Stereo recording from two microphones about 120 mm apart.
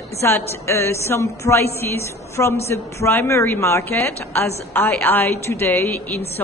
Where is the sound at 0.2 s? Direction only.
20° left (ahead or behind).